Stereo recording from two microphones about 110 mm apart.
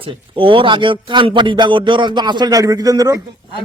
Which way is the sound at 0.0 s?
55° right (ahead or behind).